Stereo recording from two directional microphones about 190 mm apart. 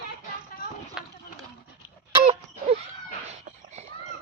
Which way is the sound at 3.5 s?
45° right (ahead or behind).